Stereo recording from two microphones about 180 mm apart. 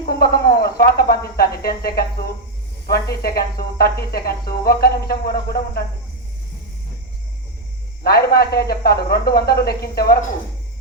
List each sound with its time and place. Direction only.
0.1 s speech: 60° left (ahead or behind)
8.0 s speech: 60° left (ahead or behind)